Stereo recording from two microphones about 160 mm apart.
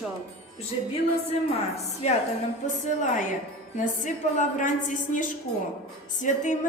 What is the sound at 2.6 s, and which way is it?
A woman's voice, 50° left (ahead or behind).